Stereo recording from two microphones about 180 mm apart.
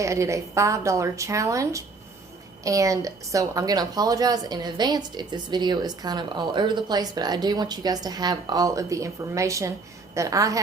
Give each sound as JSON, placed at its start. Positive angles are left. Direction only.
{"t": 0.0, "sound": "a woman's voice", "side_deg": -15}